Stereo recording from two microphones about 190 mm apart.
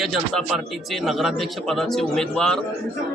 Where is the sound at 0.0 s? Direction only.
Centre (ahead or behind).